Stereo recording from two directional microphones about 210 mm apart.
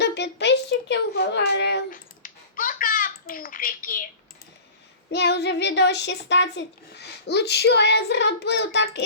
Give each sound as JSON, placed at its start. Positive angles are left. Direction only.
{"t": 0.0, "sound": "a child's voice", "side_deg": 55}
{"t": 5.1, "sound": "speech", "side_deg": 55}